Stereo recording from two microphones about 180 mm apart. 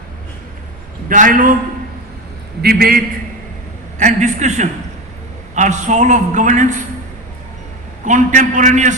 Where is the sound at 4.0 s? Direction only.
40° right (ahead or behind).